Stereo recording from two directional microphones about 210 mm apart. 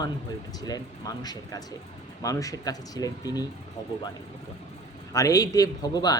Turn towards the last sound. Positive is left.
turn(degrees=20)  # may be behind; listen again after turning